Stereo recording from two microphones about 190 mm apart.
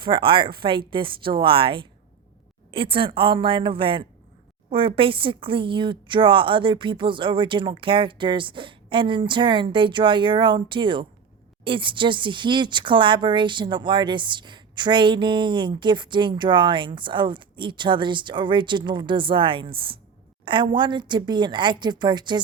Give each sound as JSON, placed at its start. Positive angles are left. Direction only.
{"t": 0.0, "sound": "speech", "side_deg": -25}